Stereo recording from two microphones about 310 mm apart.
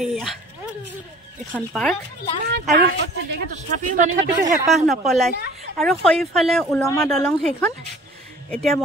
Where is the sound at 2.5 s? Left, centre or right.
Right.